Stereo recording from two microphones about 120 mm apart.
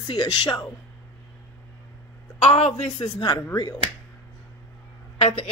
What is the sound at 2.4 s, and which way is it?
Speech, 60° left (ahead or behind).